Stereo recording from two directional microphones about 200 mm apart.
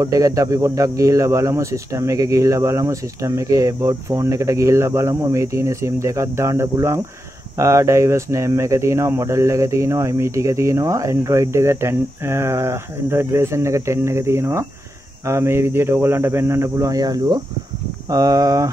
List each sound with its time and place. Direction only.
0.0 s speech: 15° right (ahead or behind)